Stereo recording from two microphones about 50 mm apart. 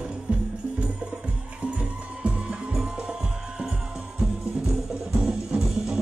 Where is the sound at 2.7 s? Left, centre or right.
Centre.